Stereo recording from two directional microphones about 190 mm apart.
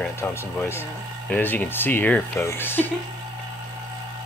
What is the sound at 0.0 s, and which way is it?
Speech, 10° left (ahead or behind).